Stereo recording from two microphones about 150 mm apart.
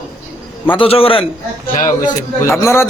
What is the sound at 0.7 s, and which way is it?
Speech, 40° left (ahead or behind).